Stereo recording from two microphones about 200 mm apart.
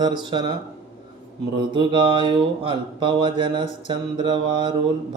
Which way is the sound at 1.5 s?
25° right (ahead or behind).